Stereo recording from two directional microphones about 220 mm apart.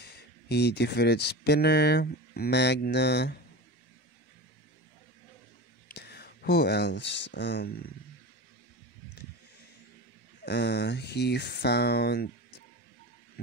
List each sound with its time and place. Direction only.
0.0 s speech: 50° left (ahead or behind)
5.9 s speech: 45° left (ahead or behind)
10.4 s speech: 50° left (ahead or behind)